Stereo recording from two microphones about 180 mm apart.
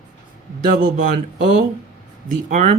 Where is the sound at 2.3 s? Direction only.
45° right (ahead or behind).